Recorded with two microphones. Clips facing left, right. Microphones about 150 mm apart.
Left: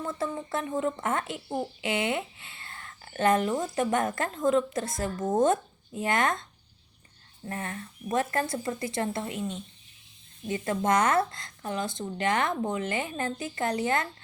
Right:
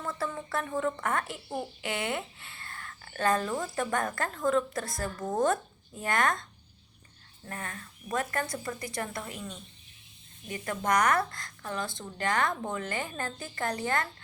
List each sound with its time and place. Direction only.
0.0 s speech: 20° left (ahead or behind)
7.4 s speech: 25° left (ahead or behind)